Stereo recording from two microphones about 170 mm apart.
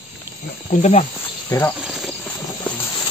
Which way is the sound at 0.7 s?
40° left (ahead or behind).